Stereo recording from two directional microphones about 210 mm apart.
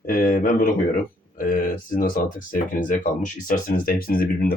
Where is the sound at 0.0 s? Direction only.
40° left (ahead or behind).